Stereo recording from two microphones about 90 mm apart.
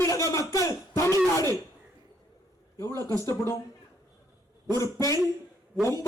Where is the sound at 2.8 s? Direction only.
35° left (ahead or behind).